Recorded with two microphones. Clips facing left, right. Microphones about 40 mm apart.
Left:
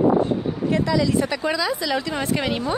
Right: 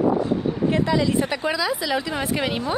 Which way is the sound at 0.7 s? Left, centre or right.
Right.